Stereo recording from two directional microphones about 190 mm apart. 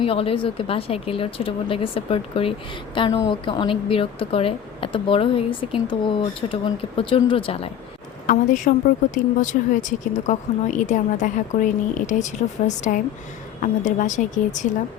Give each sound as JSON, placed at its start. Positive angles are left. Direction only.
{"t": 0.0, "sound": "speech", "side_deg": 30}
{"t": 8.3, "sound": "speech", "side_deg": 40}